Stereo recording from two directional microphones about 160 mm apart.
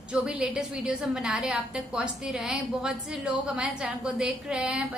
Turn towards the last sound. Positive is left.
turn(degrees=-5)  # may be behind; listen again after turning